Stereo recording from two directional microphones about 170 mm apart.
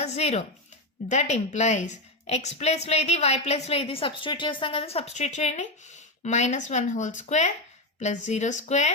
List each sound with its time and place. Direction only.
0.0 s a woman's voice: 40° left (ahead or behind)